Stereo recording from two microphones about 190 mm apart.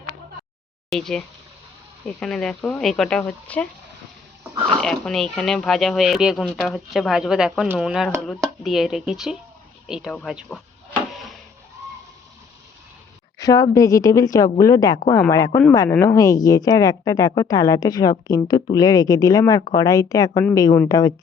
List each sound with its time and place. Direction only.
0.9 s speech: centre (ahead or behind)
2.2 s speech: 5° left (ahead or behind)
4.8 s speech: 5° left (ahead or behind)
13.4 s a woman's voice: 20° left (ahead or behind)